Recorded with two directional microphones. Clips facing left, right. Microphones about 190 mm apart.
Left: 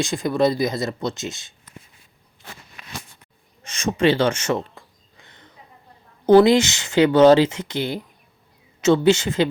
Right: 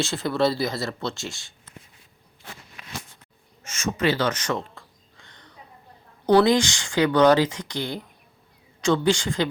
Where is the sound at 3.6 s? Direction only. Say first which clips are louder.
Left 5 dB; 30° left (ahead or behind).